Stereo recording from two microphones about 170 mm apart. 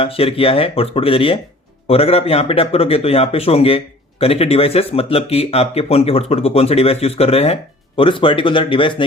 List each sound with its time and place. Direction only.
0.0 s speech: 35° left (ahead or behind)